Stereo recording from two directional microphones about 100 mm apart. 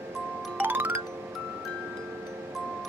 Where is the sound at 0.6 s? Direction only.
20° right (ahead or behind).